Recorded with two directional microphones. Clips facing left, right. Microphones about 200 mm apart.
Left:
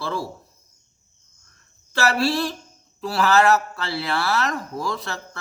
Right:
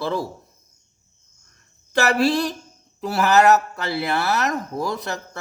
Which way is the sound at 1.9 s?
20° right (ahead or behind).